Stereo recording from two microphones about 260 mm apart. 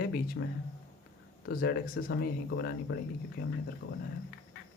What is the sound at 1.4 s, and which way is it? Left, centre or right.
Speech, left.